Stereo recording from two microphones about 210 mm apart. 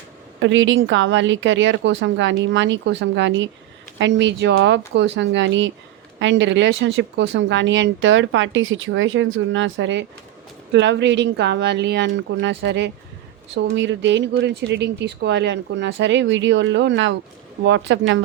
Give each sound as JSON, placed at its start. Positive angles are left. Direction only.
{"t": 0.3, "sound": "speech", "side_deg": -60}